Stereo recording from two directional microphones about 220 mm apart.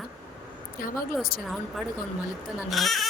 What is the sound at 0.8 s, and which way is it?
Speech, 40° left (ahead or behind).